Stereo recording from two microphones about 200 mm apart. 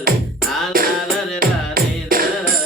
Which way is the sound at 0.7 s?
45° right (ahead or behind).